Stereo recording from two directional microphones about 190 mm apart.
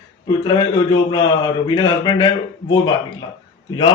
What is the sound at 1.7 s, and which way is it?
Speech, 20° left (ahead or behind).